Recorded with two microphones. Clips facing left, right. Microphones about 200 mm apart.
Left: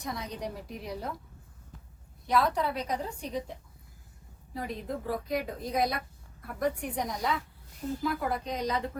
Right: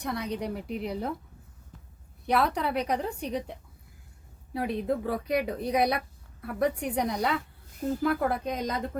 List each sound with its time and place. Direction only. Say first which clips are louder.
0.0 s a woman's voice: right 5 dB; 65° right (ahead or behind)
2.2 s a woman's voice: right 1 dB; 65° right (ahead or behind)
4.5 s a woman's voice: right 7 dB; 65° right (ahead or behind)